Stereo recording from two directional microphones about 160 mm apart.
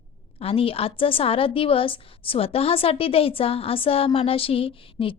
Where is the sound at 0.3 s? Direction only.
35° left (ahead or behind).